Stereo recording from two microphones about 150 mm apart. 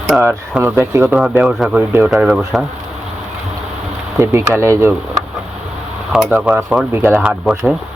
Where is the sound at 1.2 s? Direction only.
5° right (ahead or behind).